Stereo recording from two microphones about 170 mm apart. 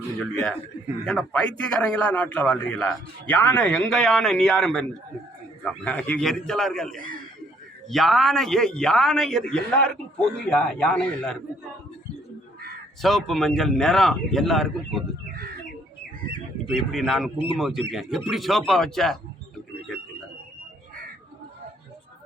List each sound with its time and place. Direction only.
1.0 s a man's voice: 5° left (ahead or behind)
13.0 s a man's voice: centre (ahead or behind)
16.7 s a man's voice: centre (ahead or behind)
17.3 s a man's voice: 30° left (ahead or behind)
17.6 s a man's voice: centre (ahead or behind)